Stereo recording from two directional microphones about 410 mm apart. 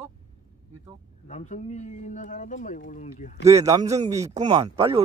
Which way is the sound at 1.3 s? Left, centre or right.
Centre.